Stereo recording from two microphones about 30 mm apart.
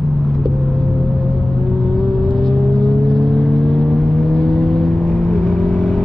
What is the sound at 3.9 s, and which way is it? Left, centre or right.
Vehicle, centre.